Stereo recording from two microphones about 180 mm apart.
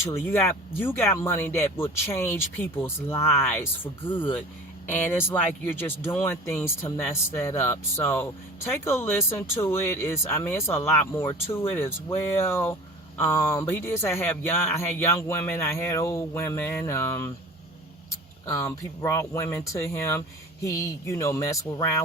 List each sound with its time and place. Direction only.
0.0 s speech: 15° left (ahead or behind)
18.4 s speech: 15° left (ahead or behind)